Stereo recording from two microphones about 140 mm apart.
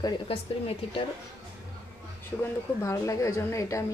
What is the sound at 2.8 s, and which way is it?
Speech, 20° left (ahead or behind).